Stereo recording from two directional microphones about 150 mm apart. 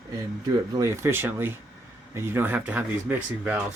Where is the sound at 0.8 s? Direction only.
20° right (ahead or behind).